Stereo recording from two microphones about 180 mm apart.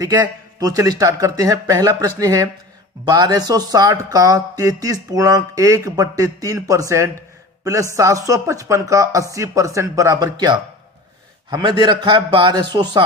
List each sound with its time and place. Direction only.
0.6 s speech: 20° right (ahead or behind)
11.5 s speech: 25° right (ahead or behind)